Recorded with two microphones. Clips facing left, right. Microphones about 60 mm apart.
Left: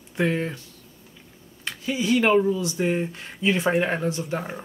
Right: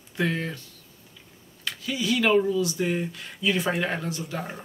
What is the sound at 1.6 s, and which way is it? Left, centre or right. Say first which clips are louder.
Speech: left 3 dB; left.